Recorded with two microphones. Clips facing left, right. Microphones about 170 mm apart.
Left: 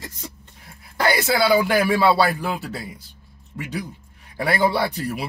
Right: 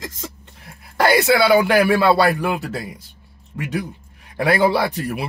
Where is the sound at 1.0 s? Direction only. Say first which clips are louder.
Right 4 dB; 65° right (ahead or behind).